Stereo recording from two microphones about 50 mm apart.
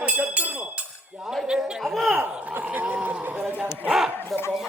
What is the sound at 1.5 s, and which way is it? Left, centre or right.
Chatter, centre.